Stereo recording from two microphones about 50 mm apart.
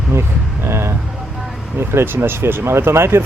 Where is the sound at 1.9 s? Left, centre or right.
Right.